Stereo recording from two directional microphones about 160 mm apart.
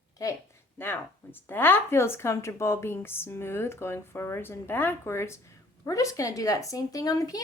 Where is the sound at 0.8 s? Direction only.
15° left (ahead or behind).